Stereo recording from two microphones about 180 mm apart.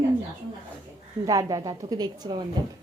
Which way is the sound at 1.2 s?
20° right (ahead or behind).